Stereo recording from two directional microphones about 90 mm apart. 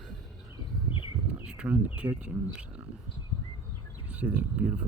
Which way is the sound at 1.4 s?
10° right (ahead or behind).